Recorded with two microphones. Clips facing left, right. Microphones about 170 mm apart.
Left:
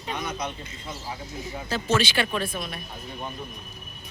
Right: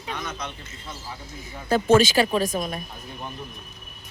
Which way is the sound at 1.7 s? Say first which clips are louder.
Right 8 dB; 55° right (ahead or behind).